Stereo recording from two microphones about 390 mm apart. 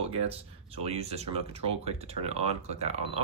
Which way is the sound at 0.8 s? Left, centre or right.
Centre.